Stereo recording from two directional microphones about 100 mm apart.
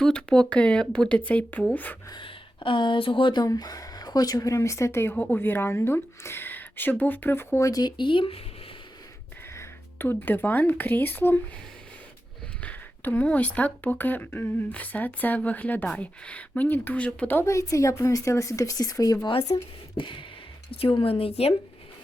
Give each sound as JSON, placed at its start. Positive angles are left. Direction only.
{"t": 0.0, "sound": "speech", "side_deg": 10}
{"t": 2.2, "sound": "speech", "side_deg": 55}
{"t": 3.4, "sound": "a woman's voice", "side_deg": 40}
{"t": 7.7, "sound": "speech", "side_deg": 45}
{"t": 9.6, "sound": "speech", "side_deg": 20}
{"t": 12.6, "sound": "speech", "side_deg": 15}
{"t": 17.4, "sound": "a woman's voice", "side_deg": 30}
{"t": 19.5, "sound": "a sound", "side_deg": 65}
{"t": 20.7, "sound": "a woman's voice", "side_deg": 65}